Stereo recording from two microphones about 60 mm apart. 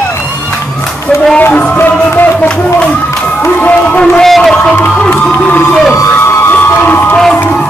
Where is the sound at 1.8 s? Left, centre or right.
Left.